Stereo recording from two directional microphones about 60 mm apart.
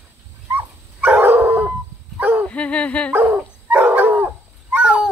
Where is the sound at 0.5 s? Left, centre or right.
Right.